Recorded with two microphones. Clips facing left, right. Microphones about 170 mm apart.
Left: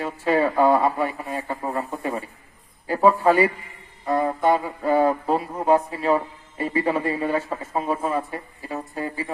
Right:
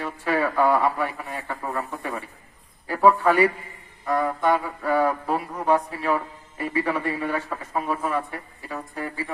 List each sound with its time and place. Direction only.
0.0 s music: 25° left (ahead or behind)
1.9 s a sound: 20° left (ahead or behind)
2.8 s a man's voice: 25° left (ahead or behind)
4.0 s music: 25° left (ahead or behind)